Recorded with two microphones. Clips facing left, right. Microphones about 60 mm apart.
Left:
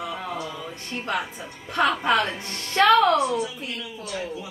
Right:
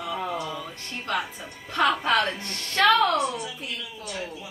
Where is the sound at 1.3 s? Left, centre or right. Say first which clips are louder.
Left 1 dB; left.